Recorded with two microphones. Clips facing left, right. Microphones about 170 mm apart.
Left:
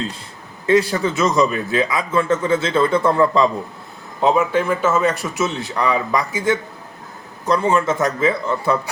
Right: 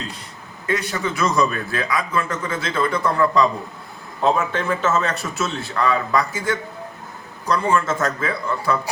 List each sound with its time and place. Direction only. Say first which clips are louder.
0.7 s a man's voice: left 7 dB; 30° left (ahead or behind)
1.2 s speech: left 2 dB; 20° left (ahead or behind)
4.2 s a man's voice: left 4 dB; 15° left (ahead or behind)